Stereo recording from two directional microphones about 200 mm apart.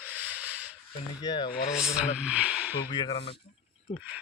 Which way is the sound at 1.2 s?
25° left (ahead or behind).